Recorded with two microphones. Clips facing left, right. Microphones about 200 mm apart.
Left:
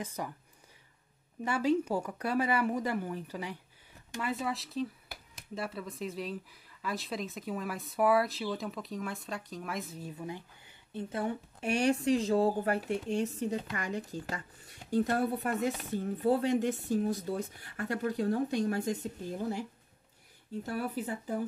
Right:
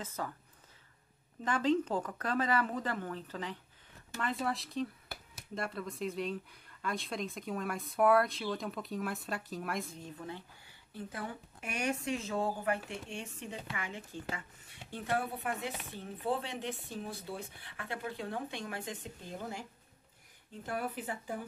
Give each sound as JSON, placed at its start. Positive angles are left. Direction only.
{"t": 0.0, "sound": "speech", "side_deg": 15}
{"t": 1.4, "sound": "speech", "side_deg": 10}
{"t": 20.6, "sound": "speech", "side_deg": 40}